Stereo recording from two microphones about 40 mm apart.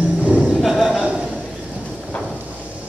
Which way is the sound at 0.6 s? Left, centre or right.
Centre.